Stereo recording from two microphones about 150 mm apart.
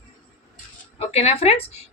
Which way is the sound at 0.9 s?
40° left (ahead or behind).